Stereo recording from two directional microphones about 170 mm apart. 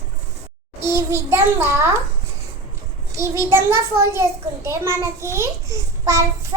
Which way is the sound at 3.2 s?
15° right (ahead or behind).